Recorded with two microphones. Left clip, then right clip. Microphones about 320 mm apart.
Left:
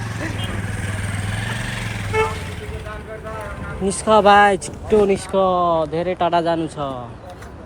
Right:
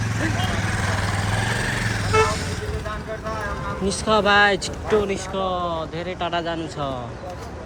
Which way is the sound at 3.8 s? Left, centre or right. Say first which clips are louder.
Left 6 dB; centre.